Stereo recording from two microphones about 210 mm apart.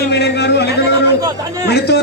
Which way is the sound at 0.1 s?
55° left (ahead or behind).